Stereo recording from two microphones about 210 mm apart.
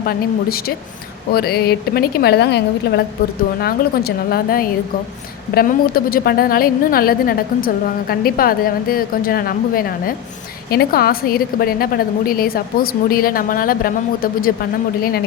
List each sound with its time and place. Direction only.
0.0 s a woman's voice: 45° left (ahead or behind)